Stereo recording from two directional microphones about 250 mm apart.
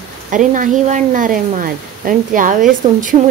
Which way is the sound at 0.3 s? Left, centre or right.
Right.